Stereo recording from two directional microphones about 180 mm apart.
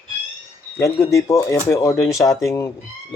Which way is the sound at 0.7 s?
15° left (ahead or behind).